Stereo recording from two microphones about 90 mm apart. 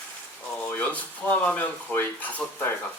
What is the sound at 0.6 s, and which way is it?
Speech, 15° left (ahead or behind).